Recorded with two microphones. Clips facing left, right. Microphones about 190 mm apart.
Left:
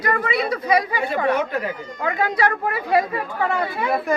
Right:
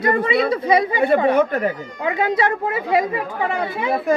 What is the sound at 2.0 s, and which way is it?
Speech, 20° right (ahead or behind).